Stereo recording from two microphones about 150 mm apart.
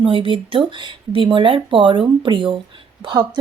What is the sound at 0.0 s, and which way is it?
Speech, 35° right (ahead or behind).